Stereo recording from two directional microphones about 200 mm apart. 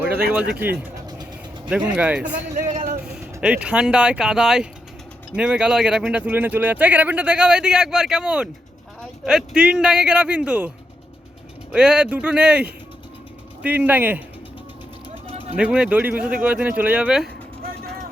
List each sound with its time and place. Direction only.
1.0 s vehicle: 20° right (ahead or behind)
1.7 s speech: 5° right (ahead or behind)
2.6 s vehicle: 45° right (ahead or behind)
3.0 s speech: 5° right (ahead or behind)
11.7 s speech: 5° right (ahead or behind)
15.5 s speech: 5° right (ahead or behind)